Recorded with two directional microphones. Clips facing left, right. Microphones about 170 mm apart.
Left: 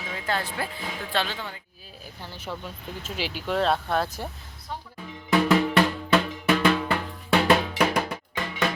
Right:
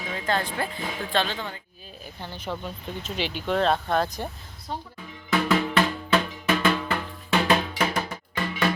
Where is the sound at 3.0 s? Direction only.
5° left (ahead or behind).